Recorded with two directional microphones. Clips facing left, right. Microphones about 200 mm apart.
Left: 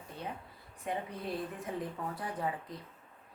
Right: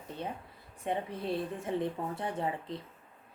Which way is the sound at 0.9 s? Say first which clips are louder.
Right 4 dB; 25° right (ahead or behind).